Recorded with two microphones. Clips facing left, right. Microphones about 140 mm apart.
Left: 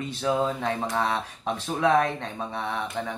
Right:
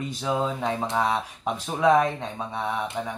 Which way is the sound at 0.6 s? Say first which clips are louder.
Right 1 dB; 15° right (ahead or behind).